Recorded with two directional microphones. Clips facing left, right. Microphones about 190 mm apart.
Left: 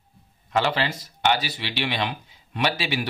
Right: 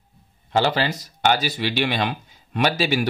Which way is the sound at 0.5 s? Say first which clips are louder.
Right 3 dB; 35° right (ahead or behind).